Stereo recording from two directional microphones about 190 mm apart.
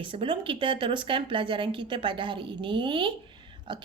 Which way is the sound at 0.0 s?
25° right (ahead or behind).